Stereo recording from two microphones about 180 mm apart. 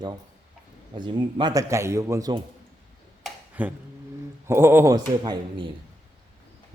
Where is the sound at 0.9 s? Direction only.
25° right (ahead or behind).